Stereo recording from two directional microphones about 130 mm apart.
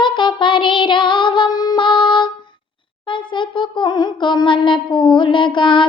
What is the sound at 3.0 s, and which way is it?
Child singing, 40° left (ahead or behind).